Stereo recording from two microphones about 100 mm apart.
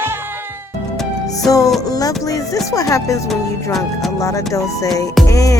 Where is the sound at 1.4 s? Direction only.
35° left (ahead or behind).